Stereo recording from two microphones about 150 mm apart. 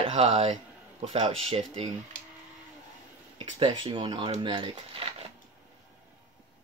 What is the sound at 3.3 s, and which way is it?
Speech, 30° right (ahead or behind).